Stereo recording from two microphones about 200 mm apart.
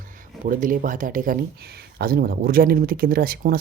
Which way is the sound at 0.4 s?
40° right (ahead or behind).